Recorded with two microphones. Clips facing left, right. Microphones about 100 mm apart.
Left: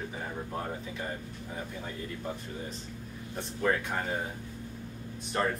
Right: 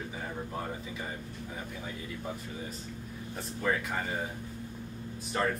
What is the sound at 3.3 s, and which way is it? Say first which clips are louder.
Speech: left 2 dB; centre (ahead or behind).